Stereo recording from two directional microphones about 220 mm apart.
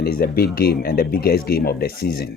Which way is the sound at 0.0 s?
45° left (ahead or behind).